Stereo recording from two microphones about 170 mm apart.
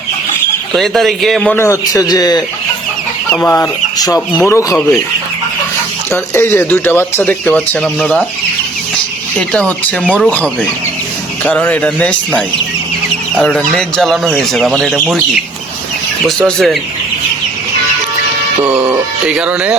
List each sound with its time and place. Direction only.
0.8 s speech: centre (ahead or behind)
1.5 s speech: 15° left (ahead or behind)
3.4 s speech: 15° left (ahead or behind)
6.1 s speech: 15° left (ahead or behind)
9.5 s speech: 5° left (ahead or behind)
16.2 s speech: centre (ahead or behind)
19.3 s speech: 5° right (ahead or behind)